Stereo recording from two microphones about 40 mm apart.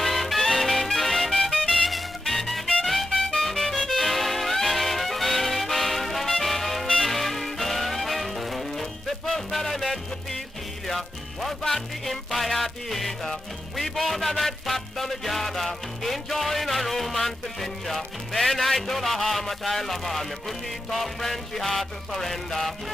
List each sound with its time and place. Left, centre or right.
0.0 s music: centre